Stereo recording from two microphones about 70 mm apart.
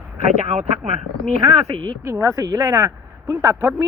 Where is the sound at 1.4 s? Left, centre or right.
Right.